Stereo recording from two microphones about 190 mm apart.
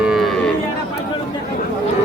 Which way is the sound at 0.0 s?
Centre (ahead or behind).